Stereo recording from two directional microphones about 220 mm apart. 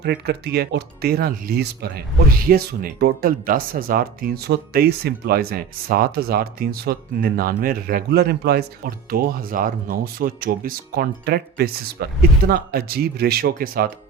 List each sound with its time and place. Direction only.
0.0 s speech: 45° right (ahead or behind)